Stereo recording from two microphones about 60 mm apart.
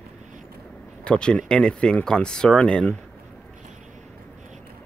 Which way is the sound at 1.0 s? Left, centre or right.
Centre.